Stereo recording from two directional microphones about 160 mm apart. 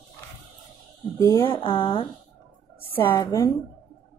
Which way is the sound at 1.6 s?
30° left (ahead or behind).